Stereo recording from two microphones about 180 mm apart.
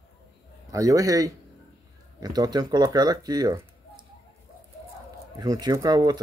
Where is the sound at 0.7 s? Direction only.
20° right (ahead or behind).